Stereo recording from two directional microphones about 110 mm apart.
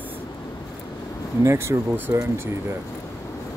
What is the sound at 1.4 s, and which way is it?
Speech, 25° right (ahead or behind).